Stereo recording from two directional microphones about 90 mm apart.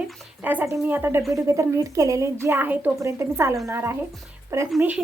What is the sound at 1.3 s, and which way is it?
Speech, 35° right (ahead or behind).